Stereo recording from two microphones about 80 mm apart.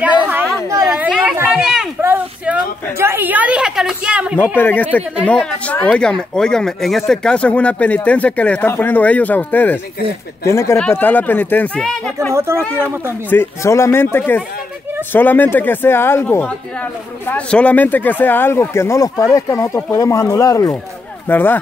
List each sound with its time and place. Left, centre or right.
0.0 s a sound: right
0.9 s chatter: centre
2.0 s a sound: right
3.0 s a woman's voice: right; by 4.4 s centre
4.4 s speech: left
10.4 s speech: left
10.9 s speech: left
12.3 s speech: right
13.3 s speech: left
17.3 s speech: centre; by 19.0 s left
19.1 s speech: left
21.3 s speech: left